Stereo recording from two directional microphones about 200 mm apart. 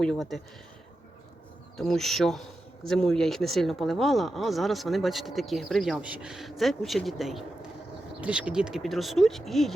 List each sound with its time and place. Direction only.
0.0 s speech: centre (ahead or behind)
1.7 s speech: centre (ahead or behind)